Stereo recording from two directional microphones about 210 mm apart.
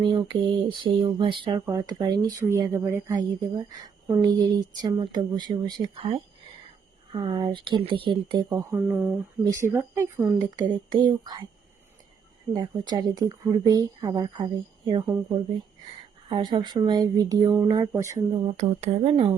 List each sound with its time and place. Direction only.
0.0 s speech: 20° right (ahead or behind)
12.5 s speech: 20° right (ahead or behind)
16.3 s speech: 20° right (ahead or behind)
18.6 s speech: 30° right (ahead or behind)